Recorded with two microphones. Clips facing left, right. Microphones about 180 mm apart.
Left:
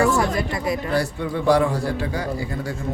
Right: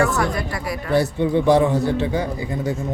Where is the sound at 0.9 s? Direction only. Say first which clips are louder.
Right 5 dB; 20° right (ahead or behind).